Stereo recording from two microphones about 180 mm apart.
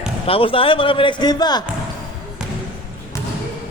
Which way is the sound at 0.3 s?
30° left (ahead or behind).